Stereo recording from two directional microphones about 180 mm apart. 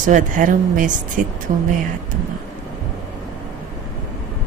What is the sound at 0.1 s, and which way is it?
Speech, 45° right (ahead or behind).